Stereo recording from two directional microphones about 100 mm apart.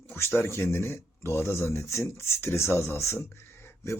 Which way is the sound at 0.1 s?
20° left (ahead or behind).